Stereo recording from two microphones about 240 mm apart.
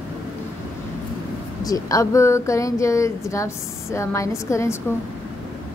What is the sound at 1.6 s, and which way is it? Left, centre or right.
Speech, centre.